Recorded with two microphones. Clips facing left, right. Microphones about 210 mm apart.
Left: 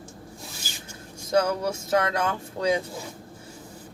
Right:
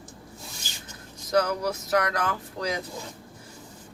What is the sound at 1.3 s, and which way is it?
Speech, 25° left (ahead or behind).